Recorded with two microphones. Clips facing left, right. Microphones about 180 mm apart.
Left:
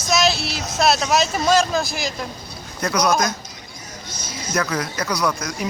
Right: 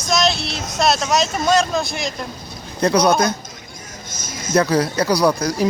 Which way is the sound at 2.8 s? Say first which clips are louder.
Right 4 dB; 30° right (ahead or behind).